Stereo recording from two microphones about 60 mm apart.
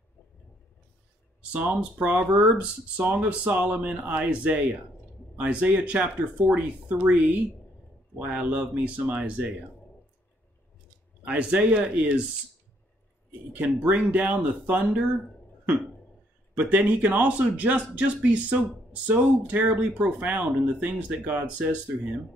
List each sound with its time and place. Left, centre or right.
1.5 s speech: right
11.2 s speech: right
13.5 s speech: right
16.5 s speech: right